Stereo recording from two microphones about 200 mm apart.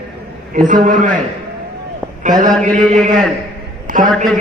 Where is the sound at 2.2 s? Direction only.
40° right (ahead or behind).